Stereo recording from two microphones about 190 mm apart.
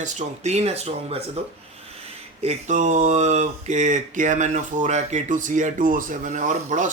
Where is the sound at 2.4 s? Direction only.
40° right (ahead or behind).